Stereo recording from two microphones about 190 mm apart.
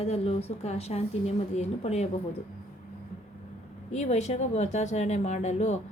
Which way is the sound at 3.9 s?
35° left (ahead or behind).